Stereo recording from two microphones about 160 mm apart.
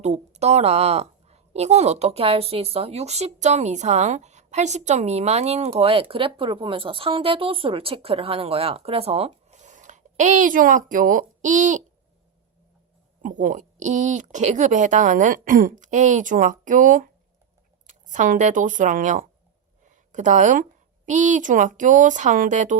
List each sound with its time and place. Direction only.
0.0 s a woman's voice: 45° right (ahead or behind)
13.2 s speech: 50° right (ahead or behind)